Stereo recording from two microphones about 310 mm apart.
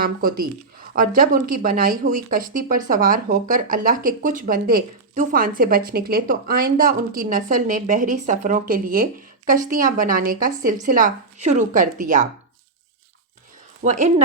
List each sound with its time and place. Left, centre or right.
0.0 s speech: right
13.8 s speech: right